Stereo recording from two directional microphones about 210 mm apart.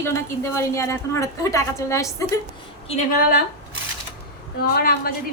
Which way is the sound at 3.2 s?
45° left (ahead or behind).